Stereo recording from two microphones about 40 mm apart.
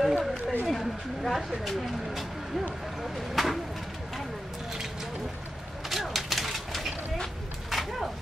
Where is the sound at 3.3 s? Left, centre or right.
Centre.